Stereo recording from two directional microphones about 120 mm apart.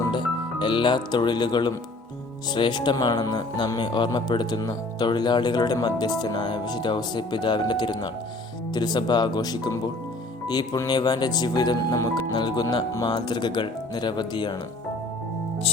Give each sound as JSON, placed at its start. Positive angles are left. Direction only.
{"t": 0.1, "sound": "speech", "side_deg": 40}